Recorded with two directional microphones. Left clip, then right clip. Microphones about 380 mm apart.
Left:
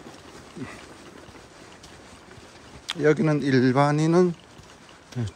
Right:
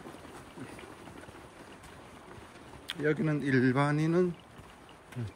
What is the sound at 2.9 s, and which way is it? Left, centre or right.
Speech, centre.